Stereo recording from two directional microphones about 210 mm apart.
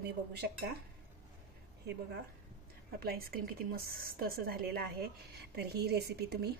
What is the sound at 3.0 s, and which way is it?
A woman's voice, 45° right (ahead or behind).